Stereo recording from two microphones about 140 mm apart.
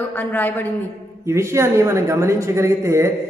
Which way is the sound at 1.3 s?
20° right (ahead or behind).